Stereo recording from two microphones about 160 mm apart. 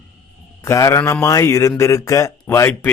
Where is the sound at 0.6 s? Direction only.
15° left (ahead or behind).